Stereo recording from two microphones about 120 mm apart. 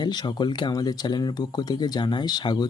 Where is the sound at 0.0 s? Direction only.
35° left (ahead or behind).